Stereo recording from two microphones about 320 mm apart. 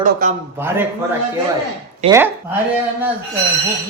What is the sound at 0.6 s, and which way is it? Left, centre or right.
Speech, centre.